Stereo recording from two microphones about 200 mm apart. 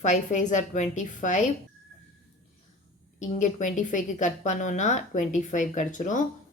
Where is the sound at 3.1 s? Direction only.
35° left (ahead or behind).